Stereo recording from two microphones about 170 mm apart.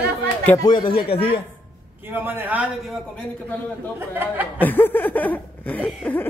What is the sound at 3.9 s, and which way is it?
Speech, 10° right (ahead or behind).